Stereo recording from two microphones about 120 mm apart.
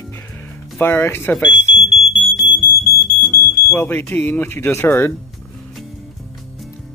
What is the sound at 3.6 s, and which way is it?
Speech, 20° left (ahead or behind).